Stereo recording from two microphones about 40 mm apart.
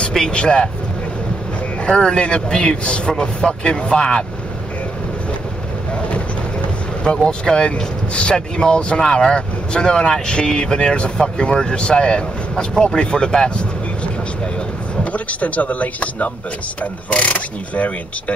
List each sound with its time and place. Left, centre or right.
0.3 s speech: left
1.9 s speech: left
7.1 s speech: left
15.1 s speech: left